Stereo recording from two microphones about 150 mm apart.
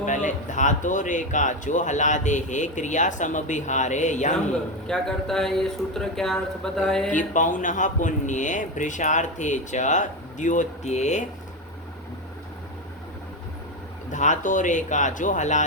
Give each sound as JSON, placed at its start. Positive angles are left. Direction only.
{"t": 0.0, "sound": "a man's voice", "side_deg": 55}
{"t": 4.9, "sound": "speech", "side_deg": 5}
{"t": 7.1, "sound": "a man's voice", "side_deg": 55}
{"t": 14.1, "sound": "a man's voice", "side_deg": 55}